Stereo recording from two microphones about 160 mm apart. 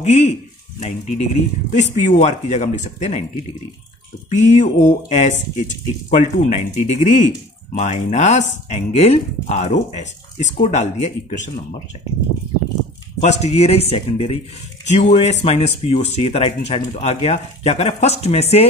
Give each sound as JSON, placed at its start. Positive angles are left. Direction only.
{"t": 0.0, "sound": "speech", "side_deg": 45}
{"t": 4.3, "sound": "speech", "side_deg": 50}
{"t": 13.2, "sound": "speech", "side_deg": 45}